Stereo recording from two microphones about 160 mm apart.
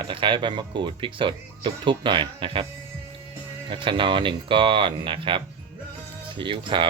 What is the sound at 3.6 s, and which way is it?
Speech, 30° right (ahead or behind).